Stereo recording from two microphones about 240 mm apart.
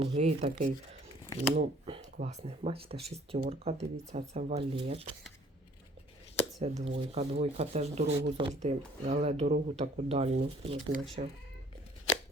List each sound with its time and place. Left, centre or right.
0.0 s speech: right
6.6 s speech: right